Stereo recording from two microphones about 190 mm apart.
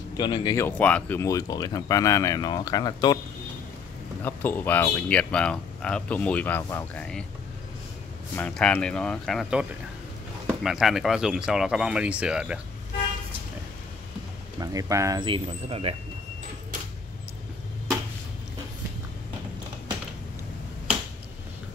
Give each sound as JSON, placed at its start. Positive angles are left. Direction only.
{"t": 0.2, "sound": "speech", "side_deg": 25}
{"t": 0.7, "sound": "speech", "side_deg": 5}
{"t": 4.2, "sound": "speech", "side_deg": 10}
{"t": 8.4, "sound": "speech", "side_deg": 5}
{"t": 14.6, "sound": "speech", "side_deg": -20}